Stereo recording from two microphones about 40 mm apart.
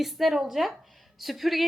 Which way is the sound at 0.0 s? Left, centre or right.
Centre.